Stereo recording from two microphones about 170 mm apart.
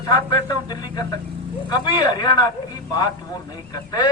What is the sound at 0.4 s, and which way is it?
A man's voice, 20° left (ahead or behind).